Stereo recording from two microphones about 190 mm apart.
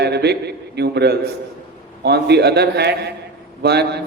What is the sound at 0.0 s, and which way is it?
A man's voice, 60° right (ahead or behind).